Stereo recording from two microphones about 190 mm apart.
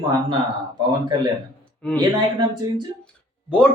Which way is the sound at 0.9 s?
20° right (ahead or behind).